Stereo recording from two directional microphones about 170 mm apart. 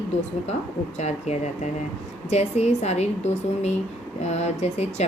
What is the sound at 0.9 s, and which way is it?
Speech, 40° left (ahead or behind).